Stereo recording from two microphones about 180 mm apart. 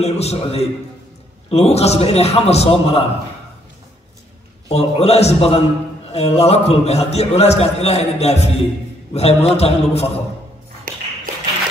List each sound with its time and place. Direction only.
0.0 s a man's voice: 35° left (ahead or behind)
4.6 s a man's voice: 35° left (ahead or behind)